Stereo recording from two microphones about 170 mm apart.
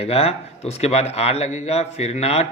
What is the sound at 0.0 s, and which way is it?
A man's voice, 35° left (ahead or behind).